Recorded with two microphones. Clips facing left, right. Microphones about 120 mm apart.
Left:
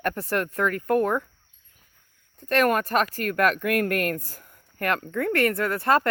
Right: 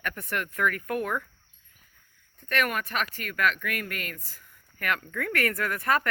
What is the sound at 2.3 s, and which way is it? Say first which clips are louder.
Speech: left 7 dB; 35° left (ahead or behind).